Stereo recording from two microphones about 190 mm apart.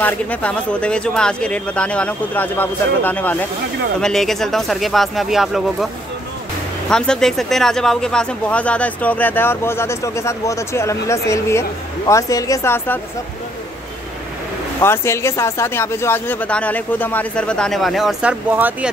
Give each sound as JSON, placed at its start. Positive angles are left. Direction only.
{"t": 0.0, "sound": "speech", "side_deg": 5}
{"t": 6.9, "sound": "speech", "side_deg": 5}
{"t": 14.8, "sound": "speech", "side_deg": 15}